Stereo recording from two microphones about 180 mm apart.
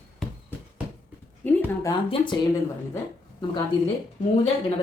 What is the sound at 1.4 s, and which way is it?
Speech, 15° left (ahead or behind).